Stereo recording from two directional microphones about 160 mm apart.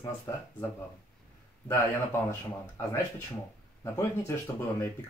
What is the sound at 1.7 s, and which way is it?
Speech, 15° left (ahead or behind).